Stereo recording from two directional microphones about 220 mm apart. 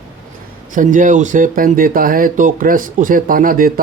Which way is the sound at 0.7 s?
35° right (ahead or behind).